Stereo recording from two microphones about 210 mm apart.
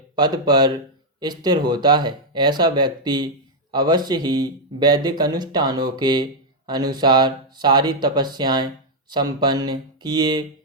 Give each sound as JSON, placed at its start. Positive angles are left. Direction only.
{"t": 0.2, "sound": "speech", "side_deg": -20}